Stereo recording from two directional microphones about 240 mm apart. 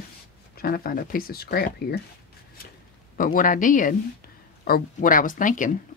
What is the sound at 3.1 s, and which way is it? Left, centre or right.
Speech, left.